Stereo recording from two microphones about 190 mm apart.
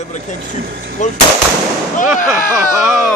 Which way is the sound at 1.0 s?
40° left (ahead or behind).